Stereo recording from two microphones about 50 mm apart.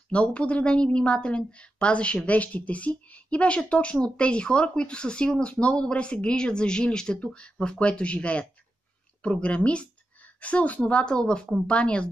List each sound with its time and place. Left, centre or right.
0.1 s speech: left